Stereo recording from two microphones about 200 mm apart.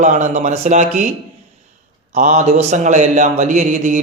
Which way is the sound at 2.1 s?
35° right (ahead or behind).